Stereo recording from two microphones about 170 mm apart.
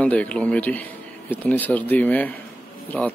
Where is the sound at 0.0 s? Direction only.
5° left (ahead or behind).